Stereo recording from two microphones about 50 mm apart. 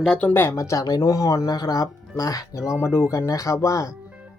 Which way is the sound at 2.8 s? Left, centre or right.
Left.